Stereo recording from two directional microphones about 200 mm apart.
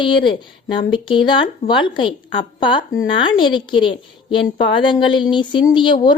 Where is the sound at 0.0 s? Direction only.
25° left (ahead or behind).